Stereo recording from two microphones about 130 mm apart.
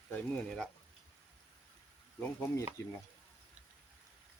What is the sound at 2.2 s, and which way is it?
Speech, 15° left (ahead or behind).